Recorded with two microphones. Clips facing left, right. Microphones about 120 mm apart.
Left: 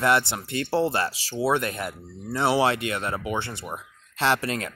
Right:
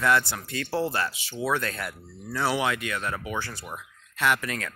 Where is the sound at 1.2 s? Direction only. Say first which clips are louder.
Left 4 dB; 35° left (ahead or behind).